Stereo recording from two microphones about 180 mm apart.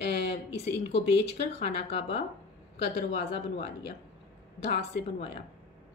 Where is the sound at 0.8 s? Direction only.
35° left (ahead or behind).